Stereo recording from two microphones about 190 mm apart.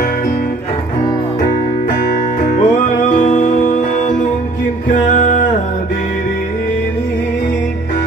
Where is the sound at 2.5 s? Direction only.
45° left (ahead or behind).